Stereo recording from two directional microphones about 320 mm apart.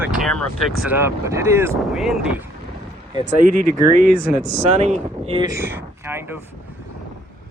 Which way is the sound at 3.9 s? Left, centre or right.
Right.